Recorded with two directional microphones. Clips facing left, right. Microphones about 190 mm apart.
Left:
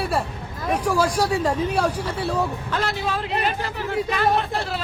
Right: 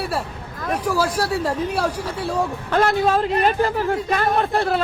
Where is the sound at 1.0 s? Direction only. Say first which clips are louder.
Left 1 dB; 5° right (ahead or behind).